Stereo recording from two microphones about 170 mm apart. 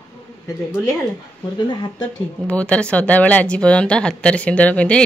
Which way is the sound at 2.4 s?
5° left (ahead or behind).